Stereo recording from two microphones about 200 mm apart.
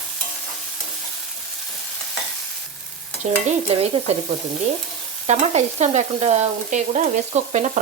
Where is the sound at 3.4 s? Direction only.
30° right (ahead or behind).